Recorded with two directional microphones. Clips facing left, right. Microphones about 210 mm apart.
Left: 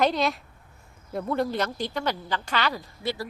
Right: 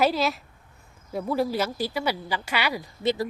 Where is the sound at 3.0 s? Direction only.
20° right (ahead or behind).